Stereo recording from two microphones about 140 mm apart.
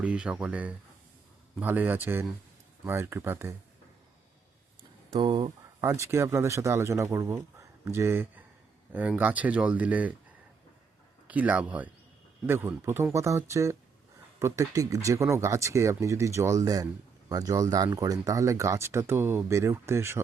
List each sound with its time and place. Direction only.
0.0 s speech: 10° right (ahead or behind)
5.1 s speech: 40° right (ahead or behind)
5.8 s speech: 20° right (ahead or behind)
11.3 s speech: 10° right (ahead or behind)